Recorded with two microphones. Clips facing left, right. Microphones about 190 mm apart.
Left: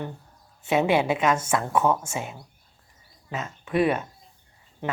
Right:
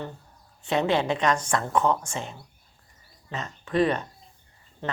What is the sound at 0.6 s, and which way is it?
A woman's voice, 5° left (ahead or behind).